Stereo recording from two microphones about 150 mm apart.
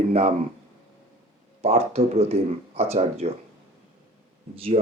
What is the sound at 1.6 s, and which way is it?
Speech, 45° right (ahead or behind).